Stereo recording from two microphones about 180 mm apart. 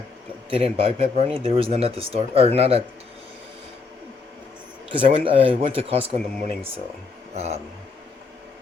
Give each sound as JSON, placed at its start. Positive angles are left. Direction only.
{"t": 0.5, "sound": "speech", "side_deg": -30}
{"t": 4.9, "sound": "speech", "side_deg": -30}
{"t": 7.3, "sound": "speech", "side_deg": -35}